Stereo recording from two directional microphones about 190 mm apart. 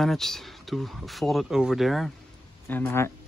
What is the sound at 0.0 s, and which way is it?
Speech, centre (ahead or behind).